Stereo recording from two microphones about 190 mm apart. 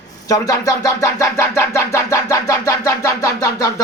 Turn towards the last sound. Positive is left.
turn(degrees=15)  # may be behind; listen again after turning